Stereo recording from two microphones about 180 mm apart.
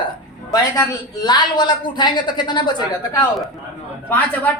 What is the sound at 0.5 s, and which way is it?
A woman's voice, 20° left (ahead or behind).